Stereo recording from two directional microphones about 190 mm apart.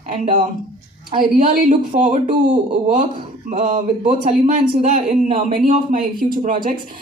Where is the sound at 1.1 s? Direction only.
35° right (ahead or behind).